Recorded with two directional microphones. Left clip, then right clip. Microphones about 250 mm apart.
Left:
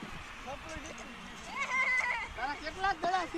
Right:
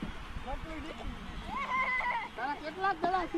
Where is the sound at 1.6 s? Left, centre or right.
Left.